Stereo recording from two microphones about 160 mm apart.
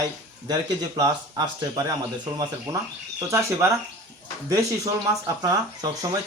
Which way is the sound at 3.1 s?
20° right (ahead or behind).